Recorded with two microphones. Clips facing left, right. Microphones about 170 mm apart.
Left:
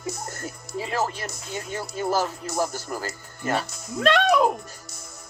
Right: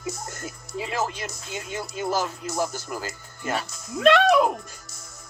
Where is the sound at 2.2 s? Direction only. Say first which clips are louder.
Left 1 dB; 30° left (ahead or behind).